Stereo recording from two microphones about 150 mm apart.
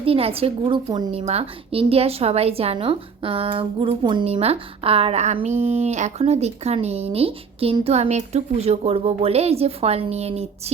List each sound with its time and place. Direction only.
0.0 s a woman's voice: 40° right (ahead or behind)
1.2 s a woman's voice: 45° right (ahead or behind)